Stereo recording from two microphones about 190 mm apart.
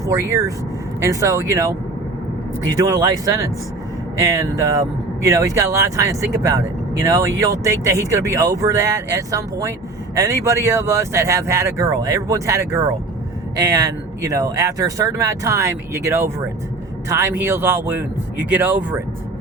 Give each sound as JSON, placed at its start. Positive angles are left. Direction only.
{"t": 0.0, "sound": "speech", "side_deg": -15}
{"t": 2.7, "sound": "speech", "side_deg": -20}